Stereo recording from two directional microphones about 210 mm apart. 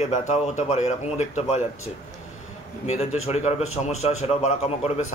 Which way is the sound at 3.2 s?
30° left (ahead or behind).